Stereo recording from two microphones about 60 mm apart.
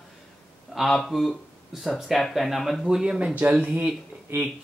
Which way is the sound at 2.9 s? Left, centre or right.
Centre.